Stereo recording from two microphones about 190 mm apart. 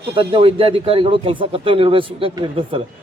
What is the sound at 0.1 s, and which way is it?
A man's voice, 30° right (ahead or behind).